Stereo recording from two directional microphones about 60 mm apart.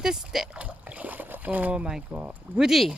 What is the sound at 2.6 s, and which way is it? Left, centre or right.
Speech, centre.